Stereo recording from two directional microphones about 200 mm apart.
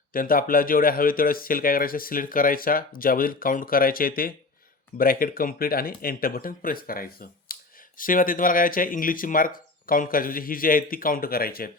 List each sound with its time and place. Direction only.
0.1 s speech: 45° left (ahead or behind)